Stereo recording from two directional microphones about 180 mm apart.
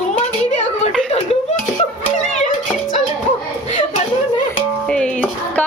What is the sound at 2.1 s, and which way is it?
Music, 45° left (ahead or behind).